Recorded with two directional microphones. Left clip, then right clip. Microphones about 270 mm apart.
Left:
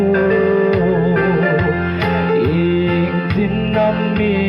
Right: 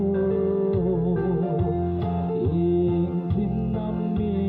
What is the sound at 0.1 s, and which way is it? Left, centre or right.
Music, left.